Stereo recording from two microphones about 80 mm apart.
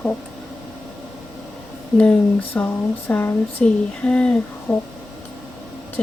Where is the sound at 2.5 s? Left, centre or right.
Left.